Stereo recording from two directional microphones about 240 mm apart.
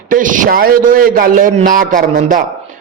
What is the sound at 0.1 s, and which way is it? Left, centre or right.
A man's voice, right.